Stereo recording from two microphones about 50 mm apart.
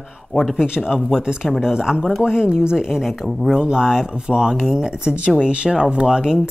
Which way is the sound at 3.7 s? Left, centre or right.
Centre.